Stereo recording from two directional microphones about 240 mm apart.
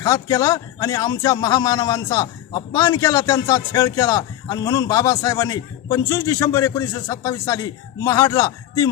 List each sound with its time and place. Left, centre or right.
0.0 s a man's voice: centre